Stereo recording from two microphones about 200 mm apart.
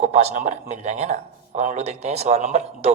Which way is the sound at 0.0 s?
35° right (ahead or behind).